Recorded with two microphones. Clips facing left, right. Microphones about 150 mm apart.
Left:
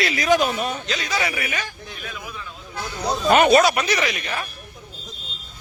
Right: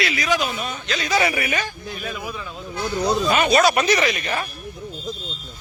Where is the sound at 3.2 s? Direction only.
55° left (ahead or behind).